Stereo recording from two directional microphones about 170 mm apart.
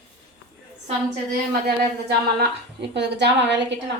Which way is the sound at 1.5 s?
70° right (ahead or behind).